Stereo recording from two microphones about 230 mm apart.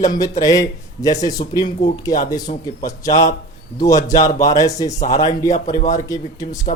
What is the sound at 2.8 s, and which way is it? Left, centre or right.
Speech, centre.